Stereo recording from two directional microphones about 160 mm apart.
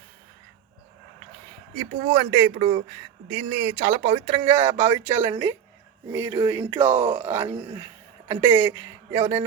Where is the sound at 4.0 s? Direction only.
40° right (ahead or behind).